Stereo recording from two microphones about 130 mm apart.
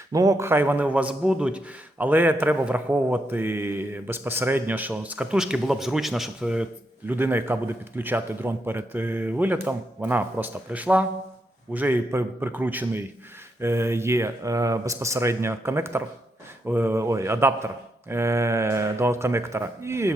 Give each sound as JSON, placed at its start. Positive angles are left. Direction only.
{"t": 0.1, "sound": "a man's voice", "side_deg": -25}
{"t": 7.1, "sound": "a man's voice", "side_deg": -15}